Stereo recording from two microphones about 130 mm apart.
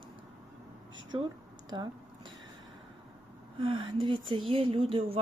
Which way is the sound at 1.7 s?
30° right (ahead or behind).